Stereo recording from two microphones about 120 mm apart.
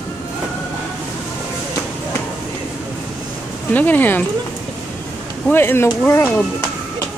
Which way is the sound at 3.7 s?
15° left (ahead or behind).